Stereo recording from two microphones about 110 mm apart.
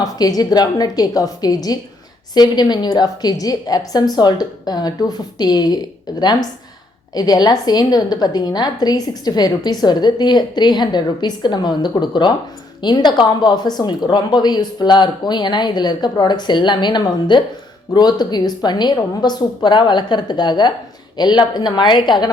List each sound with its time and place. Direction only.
0.0 s a woman's voice: 35° left (ahead or behind)